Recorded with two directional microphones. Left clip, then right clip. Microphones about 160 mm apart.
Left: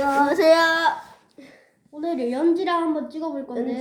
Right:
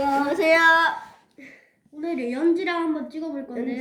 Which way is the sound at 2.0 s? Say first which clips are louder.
Left 2 dB; 5° right (ahead or behind).